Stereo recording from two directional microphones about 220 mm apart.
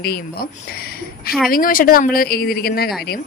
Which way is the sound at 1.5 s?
40° left (ahead or behind).